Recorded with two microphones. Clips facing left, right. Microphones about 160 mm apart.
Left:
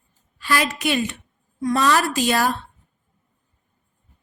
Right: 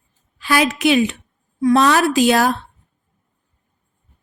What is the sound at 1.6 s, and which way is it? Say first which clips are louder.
Speech: right 5 dB; 70° right (ahead or behind).